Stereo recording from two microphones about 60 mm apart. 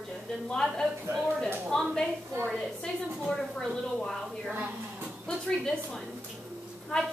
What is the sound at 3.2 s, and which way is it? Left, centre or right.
A woman's voice, centre.